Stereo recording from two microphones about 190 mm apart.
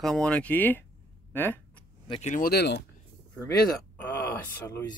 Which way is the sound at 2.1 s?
40° left (ahead or behind).